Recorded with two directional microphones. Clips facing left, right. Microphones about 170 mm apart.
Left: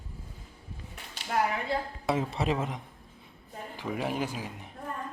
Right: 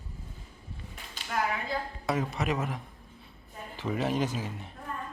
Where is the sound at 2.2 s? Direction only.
30° left (ahead or behind).